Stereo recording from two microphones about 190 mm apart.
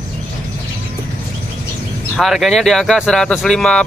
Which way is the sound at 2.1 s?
Centre (ahead or behind).